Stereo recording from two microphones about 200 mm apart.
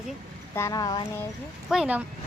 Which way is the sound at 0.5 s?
15° left (ahead or behind).